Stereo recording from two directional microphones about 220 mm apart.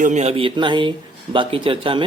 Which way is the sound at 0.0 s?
30° right (ahead or behind).